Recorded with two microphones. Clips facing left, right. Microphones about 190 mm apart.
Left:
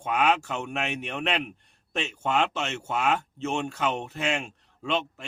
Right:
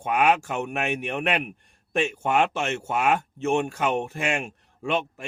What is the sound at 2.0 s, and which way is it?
Speech, 50° right (ahead or behind).